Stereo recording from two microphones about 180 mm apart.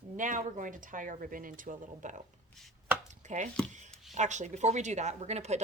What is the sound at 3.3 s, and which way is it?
Speech, 40° right (ahead or behind).